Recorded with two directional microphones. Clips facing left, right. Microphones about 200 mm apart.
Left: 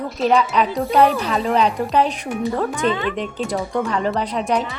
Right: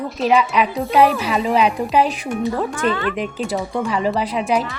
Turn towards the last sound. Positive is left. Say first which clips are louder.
# right 1 dB
turn(degrees=-5)  # may be behind; listen again after turning